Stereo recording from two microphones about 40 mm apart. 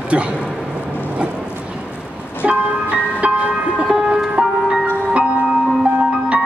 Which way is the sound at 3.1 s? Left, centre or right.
Right.